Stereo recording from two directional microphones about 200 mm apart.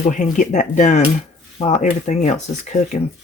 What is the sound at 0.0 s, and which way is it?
Speech, 40° left (ahead or behind).